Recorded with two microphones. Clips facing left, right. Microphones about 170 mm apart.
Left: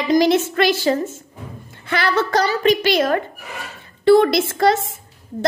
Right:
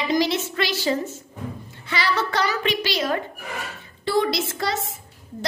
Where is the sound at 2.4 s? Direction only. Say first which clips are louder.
Left 7 dB; 40° left (ahead or behind).